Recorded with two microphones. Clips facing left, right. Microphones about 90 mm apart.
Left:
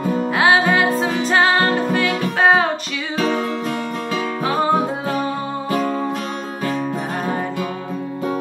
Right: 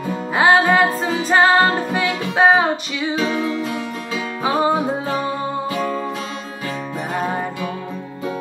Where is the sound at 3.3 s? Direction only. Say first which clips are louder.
Left 1 dB; 55° left (ahead or behind).